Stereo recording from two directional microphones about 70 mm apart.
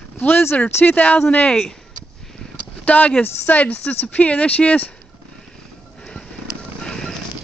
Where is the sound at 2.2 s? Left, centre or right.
Centre.